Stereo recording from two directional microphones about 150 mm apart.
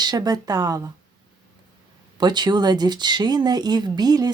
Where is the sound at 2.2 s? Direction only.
30° right (ahead or behind).